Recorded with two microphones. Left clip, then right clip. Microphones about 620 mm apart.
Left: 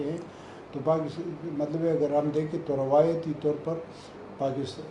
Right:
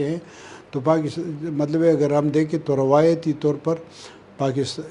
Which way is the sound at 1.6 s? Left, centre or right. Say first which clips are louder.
Right 8 dB; right.